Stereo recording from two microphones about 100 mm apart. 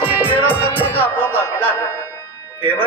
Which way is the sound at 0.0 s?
15° right (ahead or behind).